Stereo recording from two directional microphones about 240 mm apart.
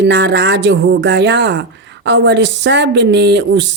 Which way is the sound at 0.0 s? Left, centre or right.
Right.